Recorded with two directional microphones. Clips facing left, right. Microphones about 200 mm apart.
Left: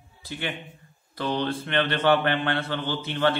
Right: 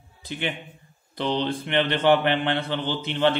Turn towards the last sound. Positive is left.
turn(degrees=-20)  # may be behind; listen again after turning